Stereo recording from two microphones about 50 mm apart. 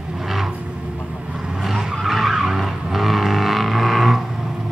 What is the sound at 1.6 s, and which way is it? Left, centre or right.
Vehicle, centre.